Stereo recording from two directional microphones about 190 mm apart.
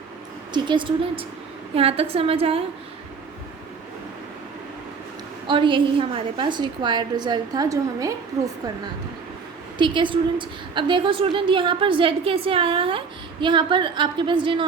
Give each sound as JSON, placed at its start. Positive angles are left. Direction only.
{"t": 0.5, "sound": "a woman's voice", "side_deg": -25}
{"t": 5.5, "sound": "a woman's voice", "side_deg": -25}
{"t": 9.7, "sound": "a woman's voice", "side_deg": -25}